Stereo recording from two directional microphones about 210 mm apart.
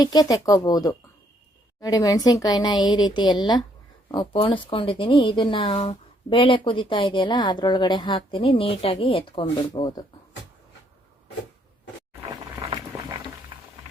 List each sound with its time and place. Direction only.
0.0 s speech: 20° left (ahead or behind)